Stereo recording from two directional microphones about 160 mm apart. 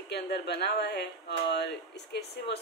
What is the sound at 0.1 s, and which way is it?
A man's voice, 90° left.